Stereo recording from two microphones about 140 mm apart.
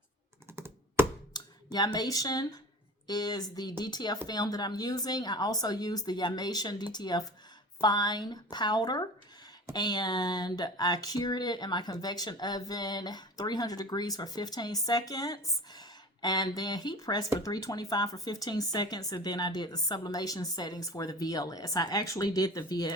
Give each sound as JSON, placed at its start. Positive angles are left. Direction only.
{"t": 0.5, "sound": "computer keyboard", "side_deg": -15}
{"t": 1.3, "sound": "speech", "side_deg": 30}